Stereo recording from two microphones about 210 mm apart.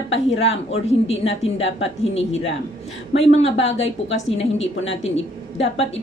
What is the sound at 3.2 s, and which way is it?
Speech, 30° left (ahead or behind).